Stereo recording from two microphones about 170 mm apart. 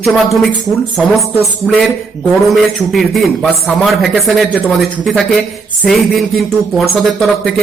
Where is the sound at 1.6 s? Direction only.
5° left (ahead or behind).